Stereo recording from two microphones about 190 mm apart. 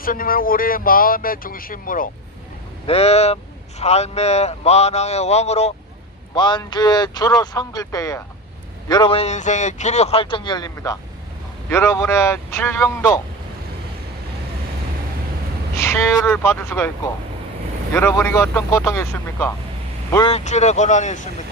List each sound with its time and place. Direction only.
0.0 s speech: 50° left (ahead or behind)
2.8 s a man's voice: 35° left (ahead or behind)
6.3 s a man's voice: 25° left (ahead or behind)
15.8 s speech: 15° left (ahead or behind)
17.9 s speech: 10° left (ahead or behind)
20.2 s a man's voice: 35° left (ahead or behind)